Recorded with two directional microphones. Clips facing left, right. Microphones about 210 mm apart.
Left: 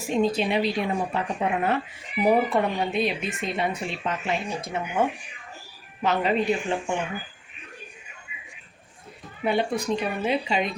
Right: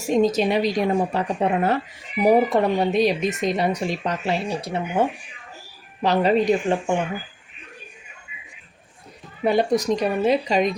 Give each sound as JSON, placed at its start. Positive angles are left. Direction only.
{"t": 0.1, "sound": "a woman's voice", "side_deg": -45}
{"t": 9.4, "sound": "a woman's voice", "side_deg": -40}